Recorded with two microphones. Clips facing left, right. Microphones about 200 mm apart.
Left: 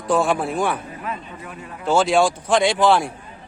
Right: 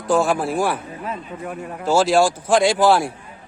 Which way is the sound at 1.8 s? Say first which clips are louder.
Right 1 dB; centre (ahead or behind).